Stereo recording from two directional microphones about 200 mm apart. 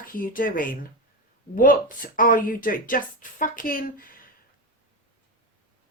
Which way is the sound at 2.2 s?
45° left (ahead or behind).